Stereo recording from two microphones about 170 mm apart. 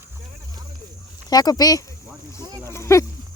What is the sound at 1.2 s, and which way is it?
Speech, 20° left (ahead or behind).